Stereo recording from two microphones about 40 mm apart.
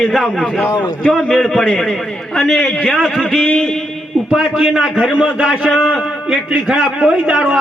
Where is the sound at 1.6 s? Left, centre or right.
Centre.